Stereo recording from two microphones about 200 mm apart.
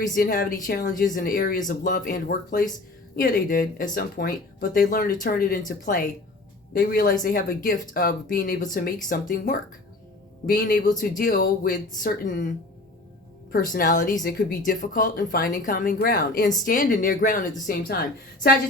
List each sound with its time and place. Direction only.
0.1 s speech: 45° left (ahead or behind)
13.7 s speech: 40° left (ahead or behind)